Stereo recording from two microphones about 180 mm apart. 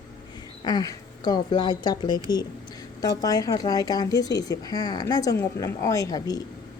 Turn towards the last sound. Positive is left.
turn(degrees=20)  # may be behind; listen again after turning